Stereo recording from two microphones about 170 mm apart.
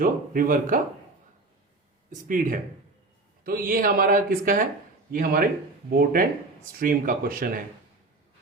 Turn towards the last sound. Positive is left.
turn(degrees=-55)  # may be behind; listen again after turning